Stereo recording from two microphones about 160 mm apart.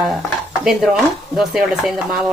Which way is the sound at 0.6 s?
5° right (ahead or behind).